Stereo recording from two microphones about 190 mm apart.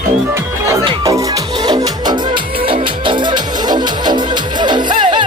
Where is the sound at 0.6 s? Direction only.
15° right (ahead or behind).